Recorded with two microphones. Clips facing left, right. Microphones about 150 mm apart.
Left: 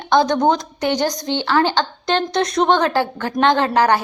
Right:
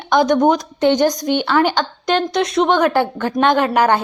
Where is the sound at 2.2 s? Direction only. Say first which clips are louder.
Right 1 dB; 35° left (ahead or behind).